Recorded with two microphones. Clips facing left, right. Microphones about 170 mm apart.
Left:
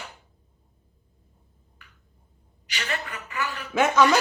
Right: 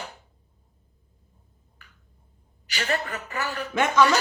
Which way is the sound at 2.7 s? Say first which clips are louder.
Right 5 dB; 40° right (ahead or behind).